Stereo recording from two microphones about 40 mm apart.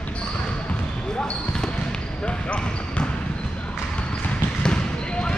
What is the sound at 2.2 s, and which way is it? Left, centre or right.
Basketball bounce, left.